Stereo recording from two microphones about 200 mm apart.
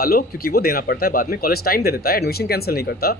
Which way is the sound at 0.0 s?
50° left (ahead or behind).